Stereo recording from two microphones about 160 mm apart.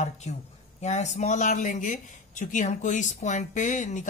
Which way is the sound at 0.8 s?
45° left (ahead or behind).